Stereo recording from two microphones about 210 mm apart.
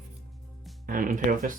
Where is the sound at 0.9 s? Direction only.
40° right (ahead or behind).